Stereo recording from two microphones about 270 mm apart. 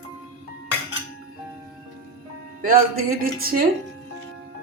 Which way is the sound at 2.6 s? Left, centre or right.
Right.